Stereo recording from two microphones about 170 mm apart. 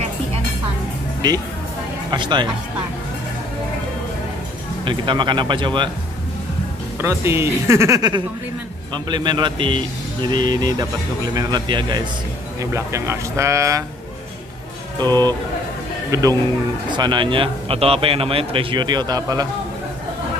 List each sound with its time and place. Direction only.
1.2 s speech: 25° right (ahead or behind)
4.8 s speech: 25° right (ahead or behind)
7.0 s speech: 15° right (ahead or behind)
15.0 s a man's voice: 25° right (ahead or behind)